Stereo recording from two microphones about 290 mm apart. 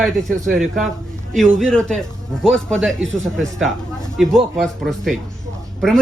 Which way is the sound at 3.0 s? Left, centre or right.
Right.